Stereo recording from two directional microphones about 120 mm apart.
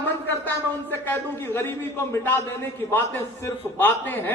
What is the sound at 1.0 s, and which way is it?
A man's voice, 20° left (ahead or behind).